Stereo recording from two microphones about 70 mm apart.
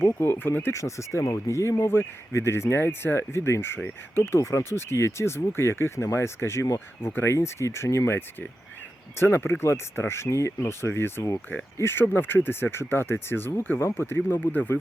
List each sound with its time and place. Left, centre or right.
0.2 s speech: left
3.8 s speech: left
4.2 s speech: left